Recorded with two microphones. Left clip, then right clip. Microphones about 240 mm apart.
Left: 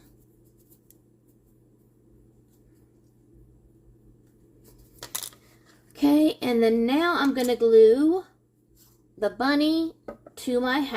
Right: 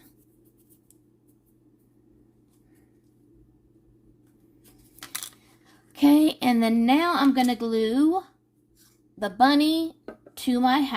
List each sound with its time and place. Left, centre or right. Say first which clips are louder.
4.9 s coin: even; centre
6.0 s a woman's voice: right 2 dB; right